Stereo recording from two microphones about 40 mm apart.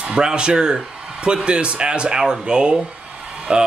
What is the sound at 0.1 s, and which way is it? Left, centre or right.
Speech, right.